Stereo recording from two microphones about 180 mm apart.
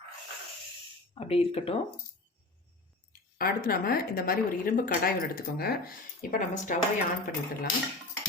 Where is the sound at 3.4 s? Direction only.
55° left (ahead or behind).